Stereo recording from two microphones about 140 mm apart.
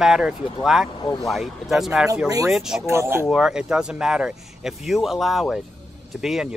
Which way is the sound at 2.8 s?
20° right (ahead or behind).